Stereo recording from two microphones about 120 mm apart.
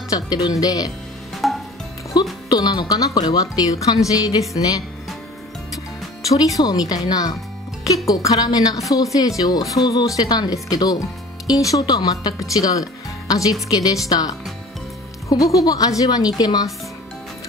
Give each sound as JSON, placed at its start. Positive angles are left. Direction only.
{"t": 0.1, "sound": "speech", "side_deg": 30}
{"t": 1.4, "sound": "music", "side_deg": 0}
{"t": 2.1, "sound": "music", "side_deg": 35}
{"t": 2.5, "sound": "speech", "side_deg": 35}
{"t": 6.2, "sound": "speech", "side_deg": 30}